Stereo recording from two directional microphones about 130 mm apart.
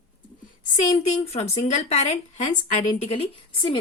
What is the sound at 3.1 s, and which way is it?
Speech, 45° left (ahead or behind).